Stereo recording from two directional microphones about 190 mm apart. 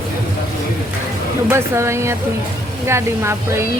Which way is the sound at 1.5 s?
15° right (ahead or behind).